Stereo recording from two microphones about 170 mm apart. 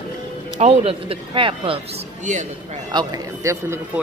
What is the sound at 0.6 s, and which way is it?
Speech, 40° right (ahead or behind).